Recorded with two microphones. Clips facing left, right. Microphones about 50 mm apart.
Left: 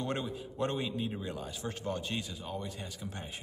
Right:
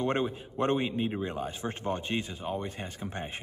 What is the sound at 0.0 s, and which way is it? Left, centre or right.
Speech, right.